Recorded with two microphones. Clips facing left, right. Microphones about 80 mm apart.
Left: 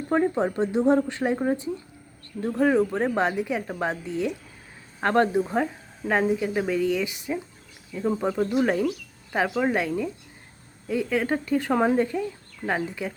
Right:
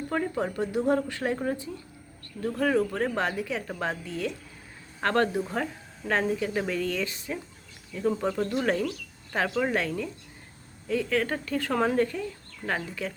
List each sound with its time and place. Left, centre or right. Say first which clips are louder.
0.1 s speech: left 7 dB; left